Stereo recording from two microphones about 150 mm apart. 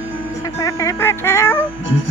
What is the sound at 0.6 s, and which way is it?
Speech, 20° left (ahead or behind).